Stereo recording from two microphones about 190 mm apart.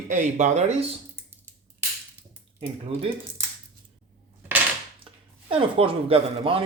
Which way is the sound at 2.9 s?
30° right (ahead or behind).